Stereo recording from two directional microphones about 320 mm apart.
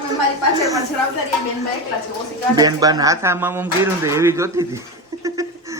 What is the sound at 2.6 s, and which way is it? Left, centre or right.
A man's voice, centre.